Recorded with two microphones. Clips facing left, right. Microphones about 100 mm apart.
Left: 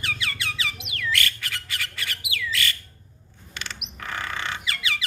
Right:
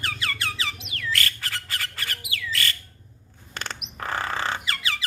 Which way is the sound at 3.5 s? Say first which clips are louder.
Right 3 dB; 40° right (ahead or behind).